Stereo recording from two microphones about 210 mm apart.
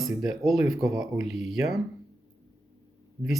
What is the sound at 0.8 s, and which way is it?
Speech, 15° right (ahead or behind).